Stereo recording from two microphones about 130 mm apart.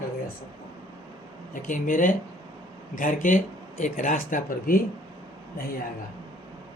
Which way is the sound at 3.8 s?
75° left (ahead or behind).